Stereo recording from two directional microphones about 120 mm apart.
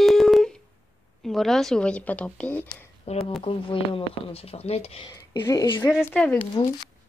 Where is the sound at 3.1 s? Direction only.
60° left (ahead or behind).